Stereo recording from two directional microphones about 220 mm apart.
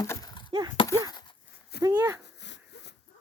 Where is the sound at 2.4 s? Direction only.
55° left (ahead or behind).